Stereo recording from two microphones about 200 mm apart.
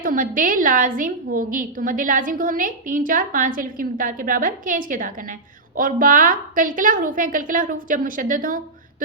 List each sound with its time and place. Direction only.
0.0 s a woman's voice: 45° right (ahead or behind)